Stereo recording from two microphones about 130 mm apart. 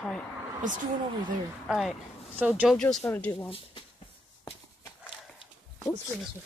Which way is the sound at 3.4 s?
45° left (ahead or behind).